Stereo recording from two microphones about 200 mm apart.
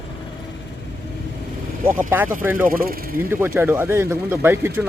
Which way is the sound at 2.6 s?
45° right (ahead or behind).